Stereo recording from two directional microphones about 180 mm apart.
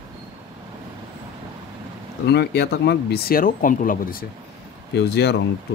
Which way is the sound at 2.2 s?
70° left (ahead or behind).